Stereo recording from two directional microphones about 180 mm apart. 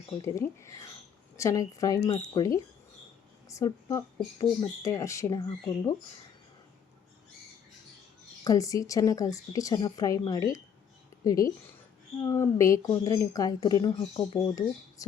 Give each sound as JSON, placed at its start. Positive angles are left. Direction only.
{"t": 0.2, "sound": "a woman's voice", "side_deg": 15}
{"t": 8.4, "sound": "a woman's voice", "side_deg": 20}